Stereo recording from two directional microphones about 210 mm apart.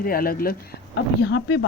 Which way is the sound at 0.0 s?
45° left (ahead or behind).